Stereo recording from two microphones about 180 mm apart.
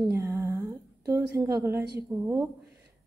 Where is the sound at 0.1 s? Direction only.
15° right (ahead or behind).